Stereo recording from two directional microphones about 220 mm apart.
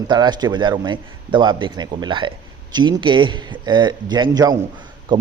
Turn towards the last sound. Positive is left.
turn(degrees=-20)  # may be behind; listen again after turning